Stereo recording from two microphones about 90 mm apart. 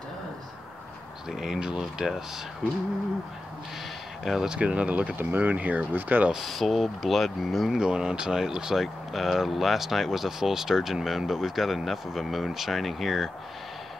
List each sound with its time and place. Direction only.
1.3 s speech: 5° right (ahead or behind)
4.2 s speech: 5° right (ahead or behind)
6.3 s speech: centre (ahead or behind)